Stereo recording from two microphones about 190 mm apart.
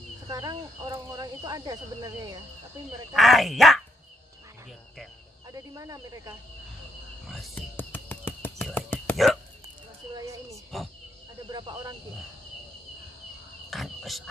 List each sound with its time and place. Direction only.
0.3 s speech: 20° right (ahead or behind)
3.1 s speech: centre (ahead or behind)
5.5 s speech: 20° right (ahead or behind)
7.2 s whispering: 5° left (ahead or behind)
10.1 s a sound: 15° right (ahead or behind)
10.7 s speech: centre (ahead or behind)
11.5 s speech: 25° right (ahead or behind)
13.7 s a sound: centre (ahead or behind)